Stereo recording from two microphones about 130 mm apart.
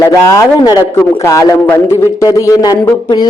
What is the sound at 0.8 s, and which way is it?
A man's voice, 20° left (ahead or behind).